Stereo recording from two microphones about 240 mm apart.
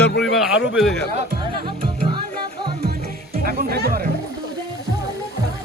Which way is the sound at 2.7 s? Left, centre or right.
Right.